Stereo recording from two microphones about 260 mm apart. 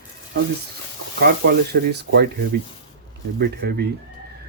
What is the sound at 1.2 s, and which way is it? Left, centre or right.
Speech, right.